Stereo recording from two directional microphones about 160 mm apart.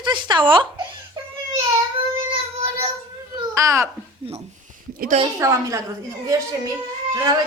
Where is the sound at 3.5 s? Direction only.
20° right (ahead or behind).